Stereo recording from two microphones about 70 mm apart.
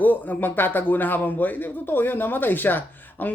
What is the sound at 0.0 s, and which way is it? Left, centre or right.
Speech, left.